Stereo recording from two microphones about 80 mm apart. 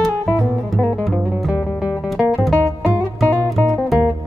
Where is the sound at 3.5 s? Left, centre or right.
Centre.